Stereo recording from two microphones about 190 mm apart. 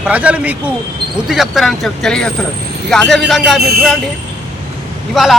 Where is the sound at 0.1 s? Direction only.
10° right (ahead or behind).